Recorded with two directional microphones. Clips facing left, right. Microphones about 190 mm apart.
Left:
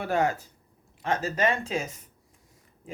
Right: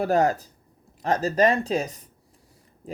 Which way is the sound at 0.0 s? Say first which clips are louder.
Right 5 dB; 40° right (ahead or behind).